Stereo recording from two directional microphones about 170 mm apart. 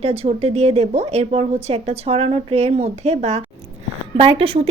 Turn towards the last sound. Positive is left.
turn(degrees=-35)  # may be behind; listen again after turning